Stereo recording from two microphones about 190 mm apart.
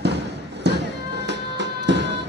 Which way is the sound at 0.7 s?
65° right (ahead or behind).